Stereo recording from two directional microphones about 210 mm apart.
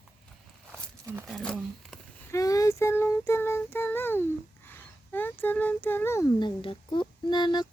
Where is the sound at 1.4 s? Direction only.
Centre (ahead or behind).